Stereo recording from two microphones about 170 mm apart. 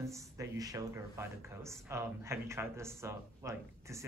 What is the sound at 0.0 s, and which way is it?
Speech, 20° right (ahead or behind).